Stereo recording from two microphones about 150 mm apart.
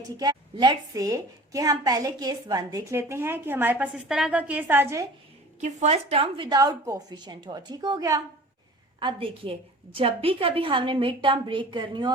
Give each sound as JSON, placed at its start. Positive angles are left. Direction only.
{"t": 0.2, "sound": "a woman's voice", "side_deg": -30}
{"t": 5.5, "sound": "a woman's voice", "side_deg": -50}